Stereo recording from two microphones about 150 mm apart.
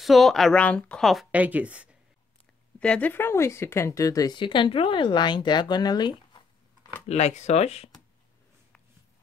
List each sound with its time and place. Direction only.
0.0 s speech: centre (ahead or behind)
2.8 s speech: 10° left (ahead or behind); by 6.9 s 30° left (ahead or behind)
7.1 s speech: 45° left (ahead or behind)